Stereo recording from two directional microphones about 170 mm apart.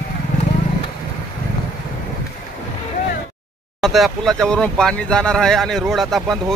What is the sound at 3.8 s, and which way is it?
Speech, centre (ahead or behind).